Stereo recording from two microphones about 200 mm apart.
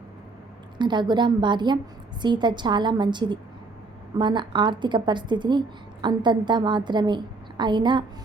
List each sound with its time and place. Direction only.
0.8 s a woman's voice: 20° right (ahead or behind)